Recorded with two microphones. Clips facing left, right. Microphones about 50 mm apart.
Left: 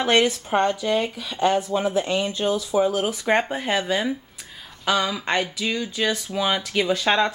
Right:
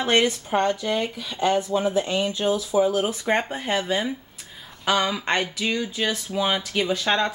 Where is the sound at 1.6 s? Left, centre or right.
Centre.